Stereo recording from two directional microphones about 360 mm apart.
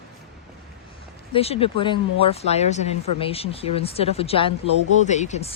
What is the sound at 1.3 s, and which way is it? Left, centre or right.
Speech, centre.